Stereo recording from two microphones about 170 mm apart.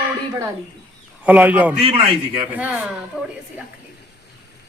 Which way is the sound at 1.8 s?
35° right (ahead or behind).